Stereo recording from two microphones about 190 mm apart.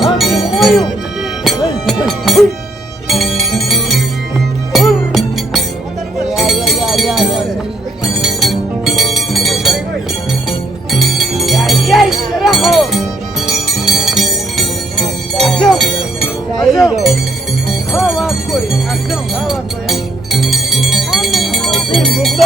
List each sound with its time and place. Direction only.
0.0 s music: centre (ahead or behind)
6.3 s a sound: centre (ahead or behind)
8.2 s music: centre (ahead or behind)
10.9 s music: centre (ahead or behind)